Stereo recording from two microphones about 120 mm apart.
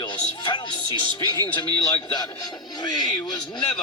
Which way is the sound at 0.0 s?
40° left (ahead or behind).